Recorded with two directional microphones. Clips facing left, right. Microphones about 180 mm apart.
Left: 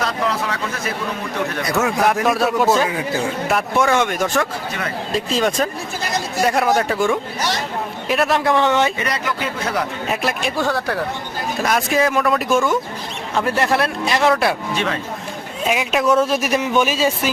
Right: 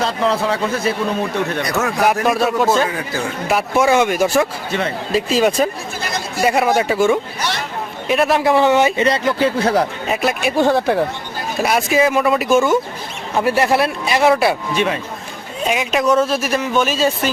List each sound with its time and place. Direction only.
0.0 s a man's voice: 30° right (ahead or behind)
1.8 s speech: centre (ahead or behind)
3.5 s speech: 10° right (ahead or behind)
9.0 s speech: 25° right (ahead or behind)
10.1 s speech: centre (ahead or behind)
10.6 s a man's voice: 25° right (ahead or behind)
11.6 s speech: 5° right (ahead or behind)
15.6 s speech: centre (ahead or behind)
16.2 s speech: 15° left (ahead or behind)